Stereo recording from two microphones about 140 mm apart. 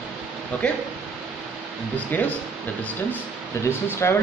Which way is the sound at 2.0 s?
10° left (ahead or behind).